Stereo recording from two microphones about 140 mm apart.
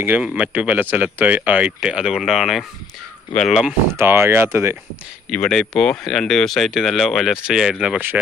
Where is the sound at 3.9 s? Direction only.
20° right (ahead or behind).